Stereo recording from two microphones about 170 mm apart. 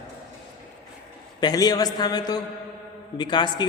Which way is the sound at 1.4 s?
20° left (ahead or behind).